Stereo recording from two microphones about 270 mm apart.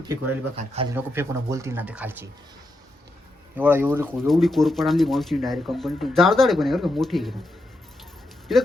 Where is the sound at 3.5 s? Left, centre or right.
Centre.